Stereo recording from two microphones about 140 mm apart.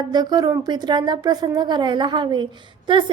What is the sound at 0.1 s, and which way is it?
Speech, 30° right (ahead or behind).